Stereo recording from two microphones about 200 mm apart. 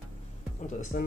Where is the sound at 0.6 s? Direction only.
40° left (ahead or behind).